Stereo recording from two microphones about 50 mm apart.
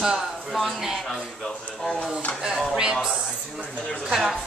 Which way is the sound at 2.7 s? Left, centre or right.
Centre.